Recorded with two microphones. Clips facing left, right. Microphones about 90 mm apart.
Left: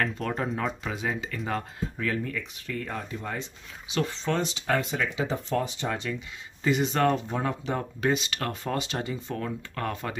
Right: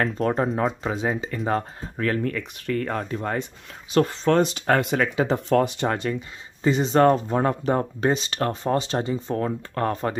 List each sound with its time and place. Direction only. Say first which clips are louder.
0.0 s speech: right 6 dB; 35° right (ahead or behind)
2.0 s speech: right 7 dB; 55° right (ahead or behind)
6.6 s speech: right 6 dB; 30° right (ahead or behind)